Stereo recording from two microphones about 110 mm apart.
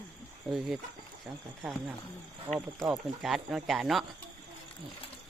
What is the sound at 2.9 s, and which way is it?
Speech, 5° right (ahead or behind).